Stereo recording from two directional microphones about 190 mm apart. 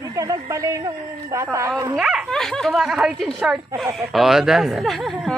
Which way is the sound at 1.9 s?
5° right (ahead or behind).